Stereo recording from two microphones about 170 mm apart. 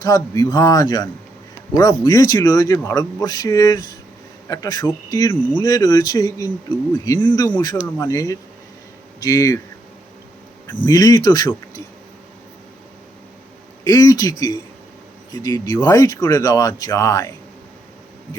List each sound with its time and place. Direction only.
0.0 s speech: 20° left (ahead or behind)
10.8 s speech: 25° left (ahead or behind)
13.8 s speech: 20° left (ahead or behind)